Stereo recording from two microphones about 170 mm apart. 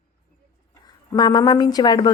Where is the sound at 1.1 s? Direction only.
25° left (ahead or behind).